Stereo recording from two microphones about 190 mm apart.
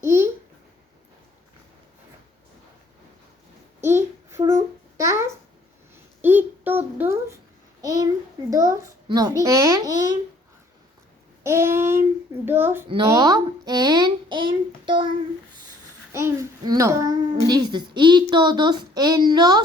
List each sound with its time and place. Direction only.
0.0 s babbling: 15° right (ahead or behind)
3.8 s babbling: 15° right (ahead or behind)
6.2 s a sound: 10° right (ahead or behind)
11.4 s child singing: 15° right (ahead or behind)
12.5 s a sound: 10° right (ahead or behind)
16.1 s babbling: 15° right (ahead or behind)